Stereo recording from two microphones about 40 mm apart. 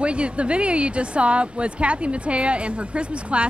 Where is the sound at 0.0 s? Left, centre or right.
Right.